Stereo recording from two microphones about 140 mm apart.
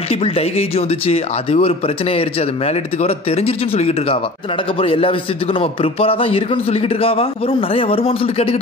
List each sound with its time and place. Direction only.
0.1 s speech: 45° left (ahead or behind)